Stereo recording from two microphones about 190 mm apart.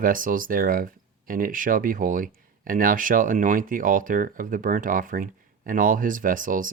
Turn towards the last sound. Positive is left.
turn(degrees=-45)  # may be behind; listen again after turning